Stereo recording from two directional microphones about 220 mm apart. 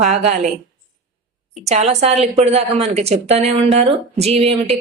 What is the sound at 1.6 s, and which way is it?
A woman's voice, 30° right (ahead or behind).